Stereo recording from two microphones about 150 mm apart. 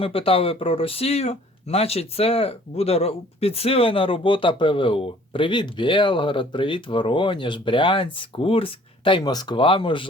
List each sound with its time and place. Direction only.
0.0 s speech: 40° left (ahead or behind)